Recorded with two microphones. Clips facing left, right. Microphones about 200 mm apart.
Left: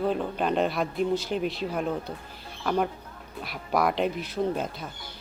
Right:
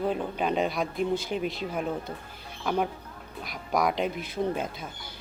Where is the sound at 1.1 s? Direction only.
55° right (ahead or behind).